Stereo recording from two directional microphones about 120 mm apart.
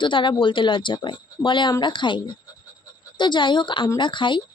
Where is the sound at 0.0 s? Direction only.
40° left (ahead or behind).